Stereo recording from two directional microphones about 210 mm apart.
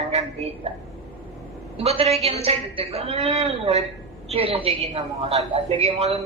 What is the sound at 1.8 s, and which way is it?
Speech, 30° right (ahead or behind).